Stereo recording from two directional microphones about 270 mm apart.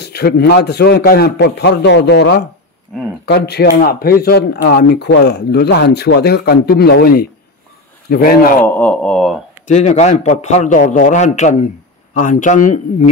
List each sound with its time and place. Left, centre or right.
0.0 s speech: left
8.6 s speech: centre
9.7 s a man's voice: left